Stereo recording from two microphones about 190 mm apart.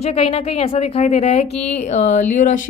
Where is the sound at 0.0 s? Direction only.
35° left (ahead or behind).